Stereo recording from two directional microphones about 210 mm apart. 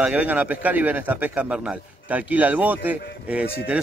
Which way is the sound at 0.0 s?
5° right (ahead or behind).